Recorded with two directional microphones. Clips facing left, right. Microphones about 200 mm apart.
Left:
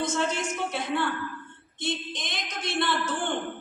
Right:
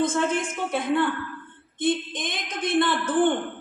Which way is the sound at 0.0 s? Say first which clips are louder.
Right 4 dB; 55° right (ahead or behind).